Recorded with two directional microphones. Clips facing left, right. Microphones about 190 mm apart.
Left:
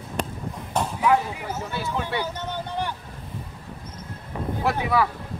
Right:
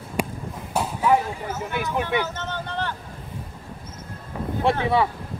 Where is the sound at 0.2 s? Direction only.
10° right (ahead or behind).